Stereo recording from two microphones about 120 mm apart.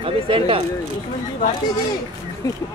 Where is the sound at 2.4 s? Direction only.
30° left (ahead or behind).